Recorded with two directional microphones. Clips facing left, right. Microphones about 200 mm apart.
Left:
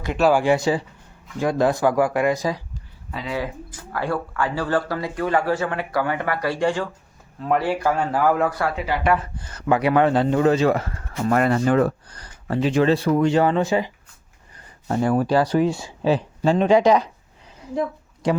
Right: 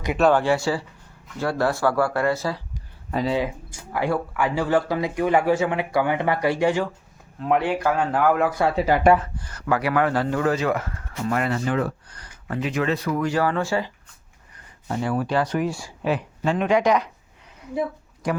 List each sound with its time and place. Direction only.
0.2 s speech: 10° left (ahead or behind)
3.3 s speech: 15° right (ahead or behind); by 8.5 s centre (ahead or behind)
8.7 s speech: 45° right (ahead or behind)
9.4 s speech: 25° left (ahead or behind)
11.2 s speech: 45° left (ahead or behind); by 13.9 s 20° left (ahead or behind)
14.8 s speech: 45° left (ahead or behind); by 17.1 s 30° left (ahead or behind)
18.2 s speech: 25° left (ahead or behind)